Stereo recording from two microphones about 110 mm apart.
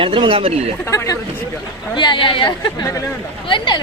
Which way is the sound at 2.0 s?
45° left (ahead or behind).